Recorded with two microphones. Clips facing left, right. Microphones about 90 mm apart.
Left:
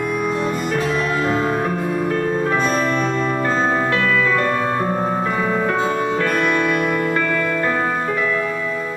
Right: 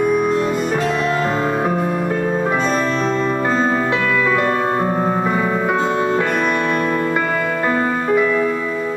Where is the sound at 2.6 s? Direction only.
5° left (ahead or behind); by 4.5 s 15° right (ahead or behind).